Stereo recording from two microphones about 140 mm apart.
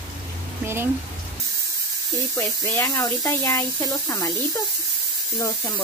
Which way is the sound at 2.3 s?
20° left (ahead or behind).